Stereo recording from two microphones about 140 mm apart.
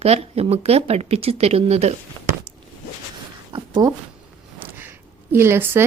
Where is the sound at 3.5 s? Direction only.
30° right (ahead or behind).